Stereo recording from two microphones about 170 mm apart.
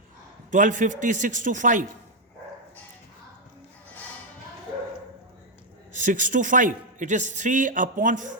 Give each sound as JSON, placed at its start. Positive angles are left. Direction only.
{"t": 0.5, "sound": "a man's voice", "side_deg": -50}
{"t": 5.9, "sound": "a man's voice", "side_deg": -50}